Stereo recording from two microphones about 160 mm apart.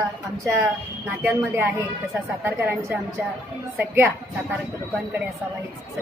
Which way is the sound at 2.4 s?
15° right (ahead or behind).